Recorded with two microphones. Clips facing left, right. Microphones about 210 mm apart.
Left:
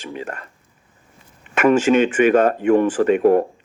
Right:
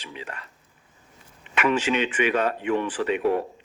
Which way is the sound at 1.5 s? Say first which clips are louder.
Left 9 dB; 45° left (ahead or behind).